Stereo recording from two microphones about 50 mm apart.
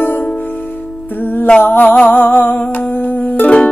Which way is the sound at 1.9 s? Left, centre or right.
Left.